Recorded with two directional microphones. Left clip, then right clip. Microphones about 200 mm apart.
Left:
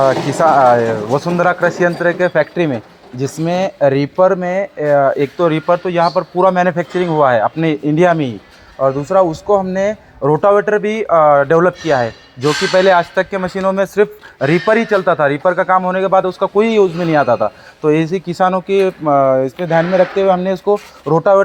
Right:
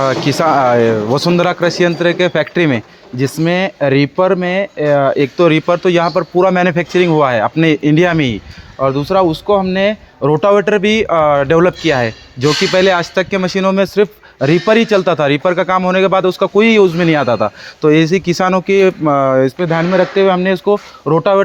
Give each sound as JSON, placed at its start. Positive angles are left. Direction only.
{"t": 0.3, "sound": "speech", "side_deg": -75}
{"t": 3.2, "sound": "speech", "side_deg": -40}
{"t": 6.7, "sound": "clang", "side_deg": -65}
{"t": 8.8, "sound": "speech", "side_deg": -35}
{"t": 9.9, "sound": "speech", "side_deg": -50}
{"t": 10.5, "sound": "speech", "side_deg": -90}
{"t": 10.8, "sound": "speech", "side_deg": -75}
{"t": 12.4, "sound": "clang", "side_deg": -55}
{"t": 20.7, "sound": "clang", "side_deg": -55}